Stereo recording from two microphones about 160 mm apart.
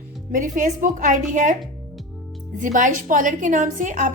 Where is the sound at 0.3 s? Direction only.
55° right (ahead or behind).